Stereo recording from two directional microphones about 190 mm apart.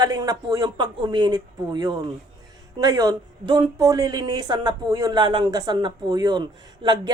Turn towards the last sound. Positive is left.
turn(degrees=-25)  # may be behind; listen again after turning